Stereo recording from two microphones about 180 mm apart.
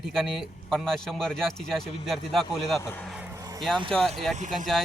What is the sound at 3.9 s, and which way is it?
Speech, 5° left (ahead or behind).